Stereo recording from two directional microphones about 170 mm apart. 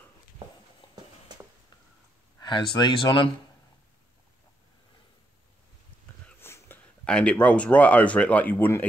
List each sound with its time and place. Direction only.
2.4 s speech: 25° left (ahead or behind)
6.2 s speech: 15° left (ahead or behind)